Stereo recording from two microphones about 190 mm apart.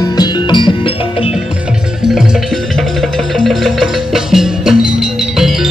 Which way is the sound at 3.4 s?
Centre (ahead or behind).